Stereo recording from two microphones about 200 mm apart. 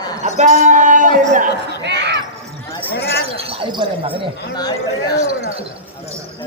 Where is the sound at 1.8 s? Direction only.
60° right (ahead or behind).